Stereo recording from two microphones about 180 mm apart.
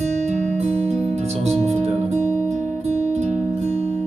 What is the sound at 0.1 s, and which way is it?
Music, 40° right (ahead or behind).